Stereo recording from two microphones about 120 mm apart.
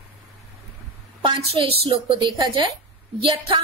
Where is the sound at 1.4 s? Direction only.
55° right (ahead or behind).